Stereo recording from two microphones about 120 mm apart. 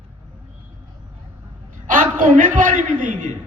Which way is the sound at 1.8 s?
90° right.